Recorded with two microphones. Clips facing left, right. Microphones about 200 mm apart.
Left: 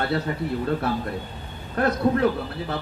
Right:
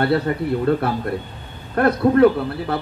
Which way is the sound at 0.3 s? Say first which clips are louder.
Right 6 dB; 65° right (ahead or behind).